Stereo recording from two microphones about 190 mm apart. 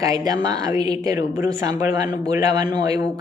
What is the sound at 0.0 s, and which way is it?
A woman's voice, 20° right (ahead or behind).